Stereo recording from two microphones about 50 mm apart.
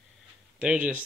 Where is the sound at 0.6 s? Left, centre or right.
Right.